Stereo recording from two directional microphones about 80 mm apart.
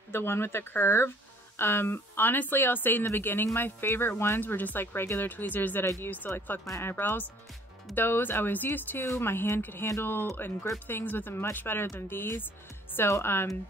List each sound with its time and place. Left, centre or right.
0.1 s speech: left
6.6 s speech: left